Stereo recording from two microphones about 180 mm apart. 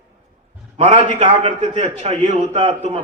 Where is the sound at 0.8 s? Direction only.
25° right (ahead or behind).